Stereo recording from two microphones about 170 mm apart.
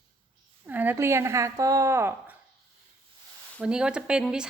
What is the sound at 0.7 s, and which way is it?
A woman's voice, 10° right (ahead or behind).